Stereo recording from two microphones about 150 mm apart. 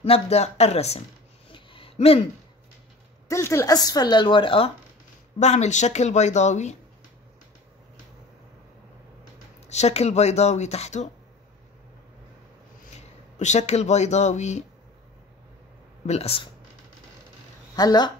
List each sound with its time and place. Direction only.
0.0 s speech: 40° left (ahead or behind)
1.5 s a sound: 35° left (ahead or behind)
3.3 s speech: 20° left (ahead or behind); by 4.7 s 35° left (ahead or behind)
5.4 s speech: 50° left (ahead or behind)
9.7 s speech: 45° left (ahead or behind)
12.9 s speech: 50° left (ahead or behind)
16.1 s speech: 40° left (ahead or behind)
17.7 s speech: 25° left (ahead or behind)